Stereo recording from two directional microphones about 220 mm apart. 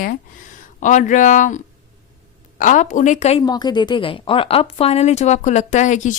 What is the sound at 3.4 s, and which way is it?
A woman's voice, 20° left (ahead or behind).